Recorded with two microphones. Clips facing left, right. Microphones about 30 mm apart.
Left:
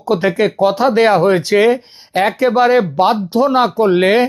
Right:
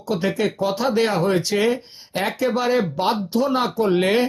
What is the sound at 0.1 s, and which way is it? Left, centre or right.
Speech, left.